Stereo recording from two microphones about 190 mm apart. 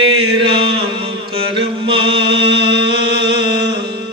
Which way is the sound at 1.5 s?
30° right (ahead or behind).